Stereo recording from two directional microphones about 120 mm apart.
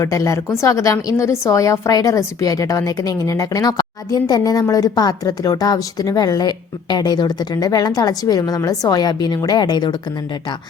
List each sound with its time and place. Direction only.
0.0 s a woman's voice: 25° left (ahead or behind)